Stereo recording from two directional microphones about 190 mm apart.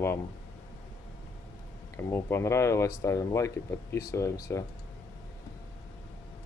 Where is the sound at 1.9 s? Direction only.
15° left (ahead or behind).